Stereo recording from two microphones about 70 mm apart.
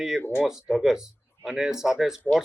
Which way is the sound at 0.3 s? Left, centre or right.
Centre.